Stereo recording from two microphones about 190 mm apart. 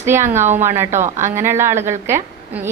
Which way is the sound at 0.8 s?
40° right (ahead or behind).